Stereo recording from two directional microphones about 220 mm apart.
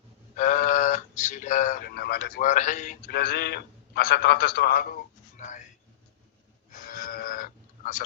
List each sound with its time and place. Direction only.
0.3 s speech: 35° left (ahead or behind)
5.4 s a sound: 35° left (ahead or behind)
6.8 s livestock: 40° left (ahead or behind)